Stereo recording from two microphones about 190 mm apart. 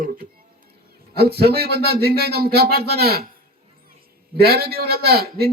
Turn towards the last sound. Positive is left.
turn(degrees=-55)  # may be behind; listen again after turning